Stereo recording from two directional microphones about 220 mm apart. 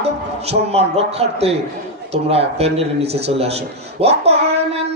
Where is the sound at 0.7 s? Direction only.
30° right (ahead or behind).